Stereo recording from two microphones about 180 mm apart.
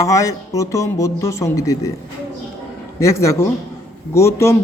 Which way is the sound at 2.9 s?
15° left (ahead or behind).